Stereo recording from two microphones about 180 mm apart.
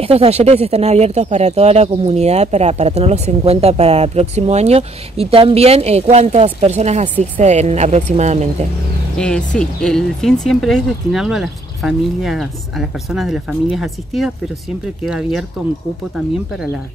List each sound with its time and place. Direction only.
0.0 s speech: 35° right (ahead or behind)
9.6 s speech: 5° left (ahead or behind)